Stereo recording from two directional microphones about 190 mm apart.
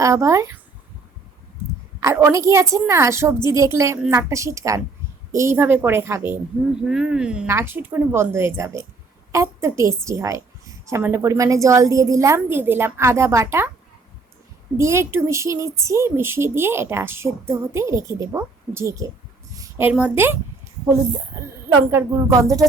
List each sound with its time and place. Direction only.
0.0 s a woman's voice: 15° right (ahead or behind)
2.0 s a woman's voice: 15° right (ahead or behind)
14.8 s a woman's voice: 15° right (ahead or behind)
19.5 s a sound: 15° right (ahead or behind)
19.9 s a woman's voice: 5° right (ahead or behind)
21.7 s a woman's voice: 15° right (ahead or behind)